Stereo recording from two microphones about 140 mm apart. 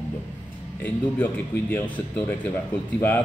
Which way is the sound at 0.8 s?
10° left (ahead or behind).